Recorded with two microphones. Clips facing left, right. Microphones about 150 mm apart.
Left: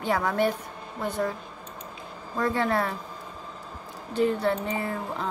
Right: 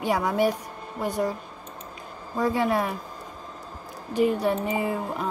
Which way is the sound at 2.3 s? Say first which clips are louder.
Right 2 dB; 10° right (ahead or behind).